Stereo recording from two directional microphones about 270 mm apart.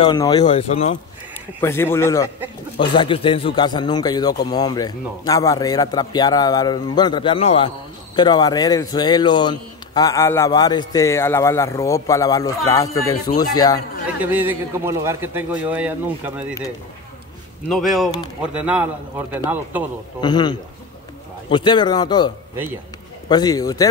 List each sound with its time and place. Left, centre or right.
0.0 s speech: centre
1.6 s a man's voice: centre
14.2 s a man's voice: centre
17.6 s a man's voice: centre
20.2 s a man's voice: centre